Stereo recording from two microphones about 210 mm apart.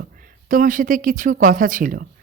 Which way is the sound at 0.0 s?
40° right (ahead or behind).